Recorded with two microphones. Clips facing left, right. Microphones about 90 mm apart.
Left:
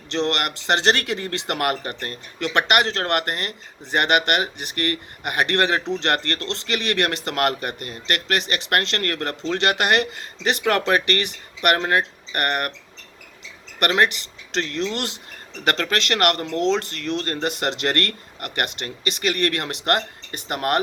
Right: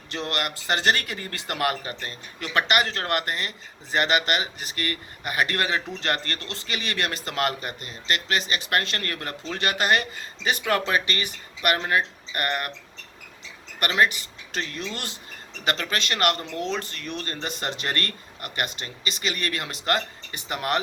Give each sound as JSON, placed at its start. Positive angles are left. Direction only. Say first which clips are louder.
{"t": 0.3, "sound": "speech", "louder": "left 1 dB", "side_deg": 70}
{"t": 14.5, "sound": "speech", "louder": "left 7 dB", "side_deg": 70}